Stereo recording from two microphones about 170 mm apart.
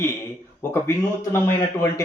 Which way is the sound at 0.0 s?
15° left (ahead or behind).